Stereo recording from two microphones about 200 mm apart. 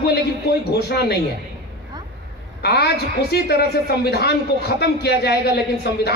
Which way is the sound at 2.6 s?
55° left (ahead or behind).